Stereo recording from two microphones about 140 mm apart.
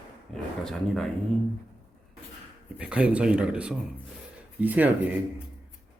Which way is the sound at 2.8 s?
10° right (ahead or behind).